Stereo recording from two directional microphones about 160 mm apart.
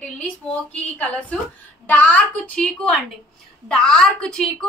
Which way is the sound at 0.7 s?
5° left (ahead or behind).